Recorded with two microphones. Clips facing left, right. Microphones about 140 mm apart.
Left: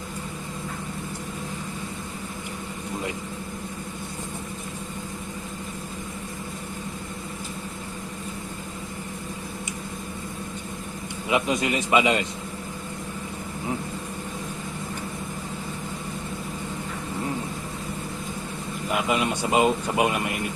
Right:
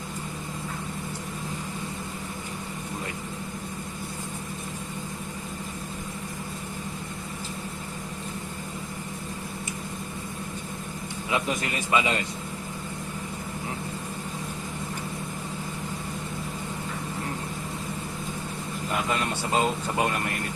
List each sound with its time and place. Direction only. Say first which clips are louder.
11.3 s a man's voice: left 5 dB; 15° left (ahead or behind)
18.9 s speech: left 4 dB; 15° left (ahead or behind)